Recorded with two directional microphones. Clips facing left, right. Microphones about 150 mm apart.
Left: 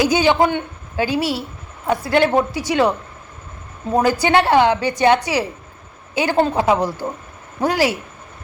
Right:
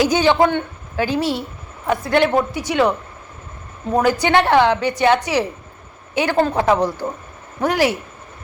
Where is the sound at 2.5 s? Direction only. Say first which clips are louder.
Left 1 dB; 10° left (ahead or behind).